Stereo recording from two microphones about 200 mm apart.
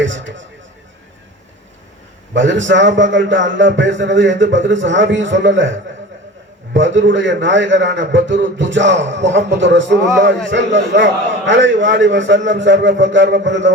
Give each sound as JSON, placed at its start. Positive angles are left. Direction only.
{"t": 0.0, "sound": "a sound", "side_deg": -70}
{"t": 2.3, "sound": "a man's voice", "side_deg": -65}
{"t": 6.7, "sound": "a man's voice", "side_deg": -70}